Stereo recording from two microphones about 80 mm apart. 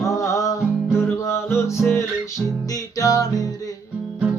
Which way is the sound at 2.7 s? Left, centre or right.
Left.